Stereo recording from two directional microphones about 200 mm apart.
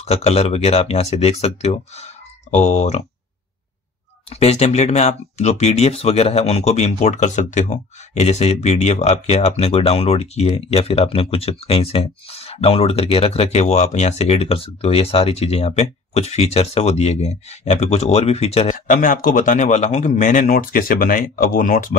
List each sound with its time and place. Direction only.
0.0 s speech: 30° left (ahead or behind)
4.3 s speech: 30° left (ahead or behind)
18.9 s speech: 45° left (ahead or behind)